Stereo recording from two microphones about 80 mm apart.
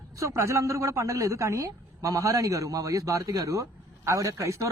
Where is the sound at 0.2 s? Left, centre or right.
Right.